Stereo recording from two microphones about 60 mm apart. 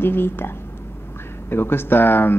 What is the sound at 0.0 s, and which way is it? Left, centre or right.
Speech, left.